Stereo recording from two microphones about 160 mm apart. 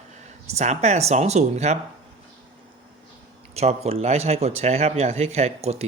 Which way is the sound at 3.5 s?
40° right (ahead or behind).